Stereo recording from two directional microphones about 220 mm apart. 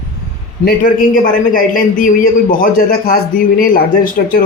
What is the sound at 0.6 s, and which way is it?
Speech, 40° left (ahead or behind).